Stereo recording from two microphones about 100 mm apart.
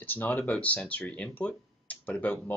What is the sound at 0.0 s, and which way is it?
Speech, 20° left (ahead or behind).